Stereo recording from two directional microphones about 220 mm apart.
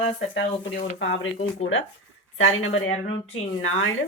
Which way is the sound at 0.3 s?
55° left (ahead or behind).